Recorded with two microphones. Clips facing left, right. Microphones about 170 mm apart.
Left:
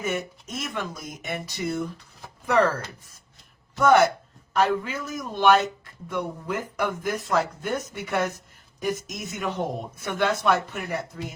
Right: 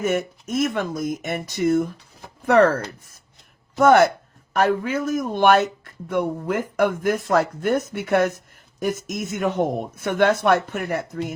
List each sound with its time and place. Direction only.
0.0 s speech: 50° right (ahead or behind)
3.8 s speech: 55° right (ahead or behind)